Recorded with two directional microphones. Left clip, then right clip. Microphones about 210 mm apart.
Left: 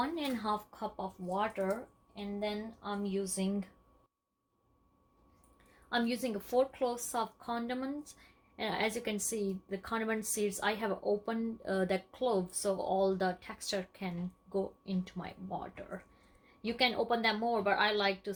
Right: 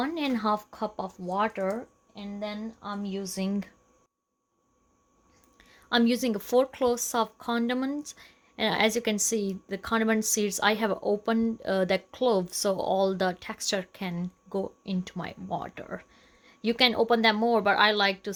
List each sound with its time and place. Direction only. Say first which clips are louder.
0.0 s a woman's voice: right 7 dB; 50° right (ahead or behind)
5.5 s a woman's voice: right 8 dB; 50° right (ahead or behind)